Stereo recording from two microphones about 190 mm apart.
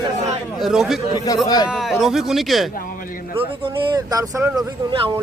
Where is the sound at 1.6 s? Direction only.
Centre (ahead or behind).